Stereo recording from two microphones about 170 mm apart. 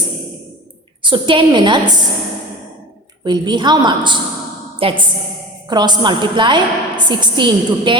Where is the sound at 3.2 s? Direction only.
25° right (ahead or behind).